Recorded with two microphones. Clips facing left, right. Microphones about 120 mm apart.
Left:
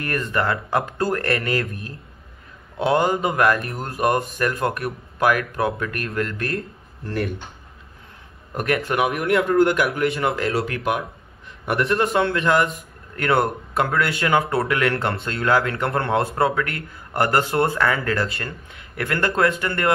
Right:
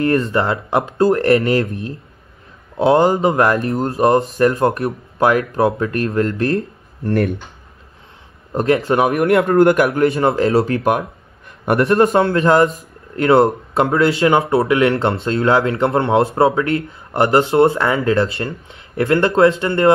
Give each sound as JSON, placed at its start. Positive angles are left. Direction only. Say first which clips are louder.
{"t": 0.0, "sound": "speech", "louder": "right 7 dB", "side_deg": -25}
{"t": 7.1, "sound": "a man's voice", "louder": "right 8 dB", "side_deg": -55}
{"t": 8.5, "sound": "speech", "louder": "right 6 dB", "side_deg": -25}
{"t": 9.2, "sound": "a man's voice", "louder": "right 5 dB", "side_deg": -60}
{"t": 9.8, "sound": "speech", "louder": "right 7 dB", "side_deg": -35}
{"t": 10.8, "sound": "a man's voice", "louder": "right 6 dB", "side_deg": -45}
{"t": 12.2, "sound": "speech", "louder": "right 6 dB", "side_deg": -30}